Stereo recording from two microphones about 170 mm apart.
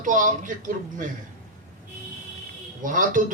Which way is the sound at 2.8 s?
50° right (ahead or behind).